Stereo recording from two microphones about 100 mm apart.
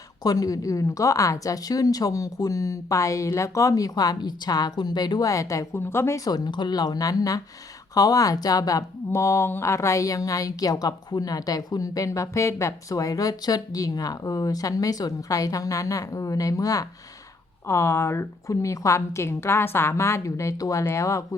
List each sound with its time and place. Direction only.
0.2 s speech: 40° left (ahead or behind)
6.2 s a woman's voice: 45° left (ahead or behind)